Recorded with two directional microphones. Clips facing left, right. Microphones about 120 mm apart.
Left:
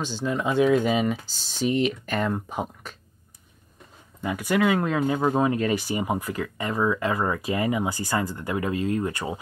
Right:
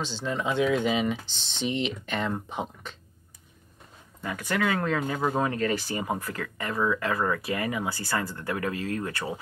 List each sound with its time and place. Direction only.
0.0 s speech: 10° left (ahead or behind)
1.6 s speech: 45° left (ahead or behind)
2.0 s speech: 5° left (ahead or behind)
4.2 s speech: 15° left (ahead or behind)